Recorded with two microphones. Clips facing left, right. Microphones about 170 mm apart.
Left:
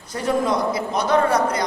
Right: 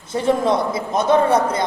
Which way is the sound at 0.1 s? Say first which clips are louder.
Right 3 dB; 25° right (ahead or behind).